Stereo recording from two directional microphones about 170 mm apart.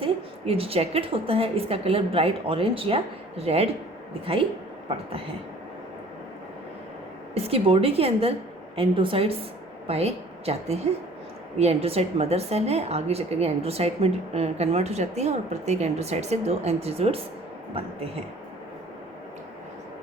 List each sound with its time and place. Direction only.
0.0 s a woman's voice: 35° right (ahead or behind)
7.3 s a woman's voice: 35° right (ahead or behind)